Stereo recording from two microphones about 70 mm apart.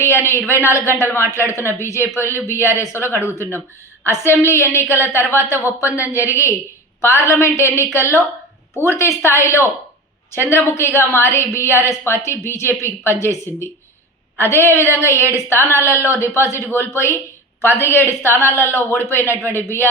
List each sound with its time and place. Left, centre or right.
0.0 s a woman's voice: left